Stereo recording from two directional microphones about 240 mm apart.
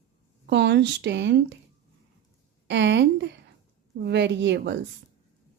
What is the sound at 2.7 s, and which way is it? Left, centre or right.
Speech, right.